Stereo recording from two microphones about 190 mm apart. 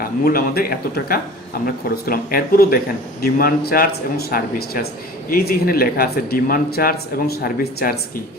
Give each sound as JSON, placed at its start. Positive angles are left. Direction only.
{"t": 0.0, "sound": "speech", "side_deg": 50}